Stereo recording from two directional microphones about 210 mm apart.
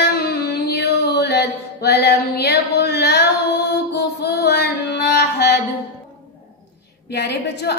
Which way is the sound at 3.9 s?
50° left (ahead or behind).